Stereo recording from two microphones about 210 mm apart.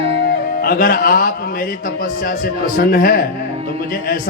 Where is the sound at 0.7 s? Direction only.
40° left (ahead or behind).